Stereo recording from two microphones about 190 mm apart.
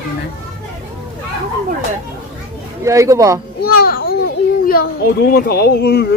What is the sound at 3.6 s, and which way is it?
Children playing, 50° left (ahead or behind).